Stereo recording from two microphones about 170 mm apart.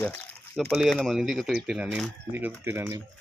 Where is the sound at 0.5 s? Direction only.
Centre (ahead or behind); by 3.0 s 15° right (ahead or behind).